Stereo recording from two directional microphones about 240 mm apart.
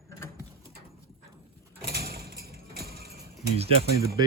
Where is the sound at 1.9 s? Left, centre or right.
Right.